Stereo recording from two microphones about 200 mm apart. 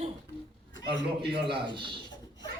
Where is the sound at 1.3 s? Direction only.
25° right (ahead or behind).